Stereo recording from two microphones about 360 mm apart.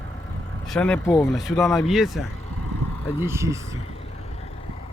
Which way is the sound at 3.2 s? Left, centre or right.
Centre.